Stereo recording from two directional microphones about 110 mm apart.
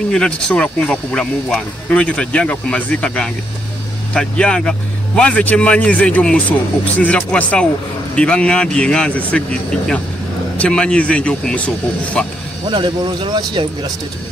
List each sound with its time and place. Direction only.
0.1 s speech: 5° left (ahead or behind)
12.6 s speech: 45° right (ahead or behind)